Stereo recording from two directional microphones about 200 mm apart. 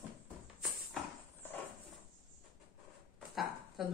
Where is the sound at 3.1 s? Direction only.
Centre (ahead or behind).